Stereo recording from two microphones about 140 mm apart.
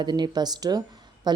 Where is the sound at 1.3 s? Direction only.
30° right (ahead or behind).